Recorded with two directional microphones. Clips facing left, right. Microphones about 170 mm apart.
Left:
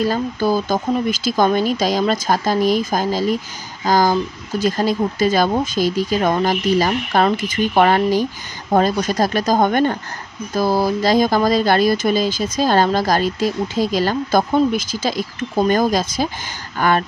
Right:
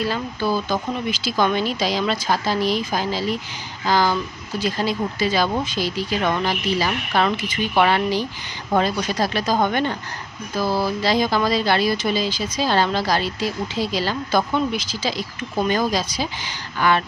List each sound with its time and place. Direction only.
0.0 s speech: 45° left (ahead or behind)